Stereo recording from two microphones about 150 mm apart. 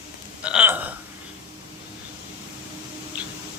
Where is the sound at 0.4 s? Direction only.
10° right (ahead or behind).